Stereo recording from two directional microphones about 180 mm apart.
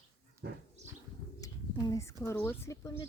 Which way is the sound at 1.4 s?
20° left (ahead or behind).